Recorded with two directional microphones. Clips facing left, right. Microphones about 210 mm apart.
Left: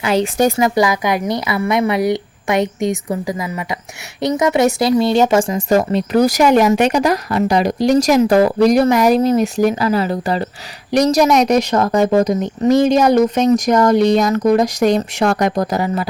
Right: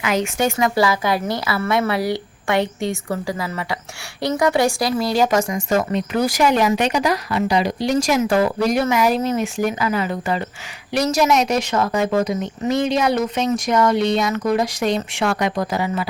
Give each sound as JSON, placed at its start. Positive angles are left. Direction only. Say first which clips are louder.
{"t": 0.0, "sound": "speech", "louder": "left 5 dB", "side_deg": 30}
{"t": 0.6, "sound": "a woman's voice", "louder": "left 3 dB", "side_deg": 15}